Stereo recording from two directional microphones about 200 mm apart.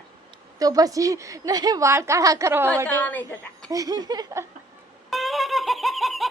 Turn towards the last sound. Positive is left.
turn(degrees=0)  # may be behind; listen again after turning